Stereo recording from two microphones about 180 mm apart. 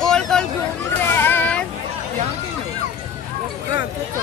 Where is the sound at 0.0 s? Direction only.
5° left (ahead or behind).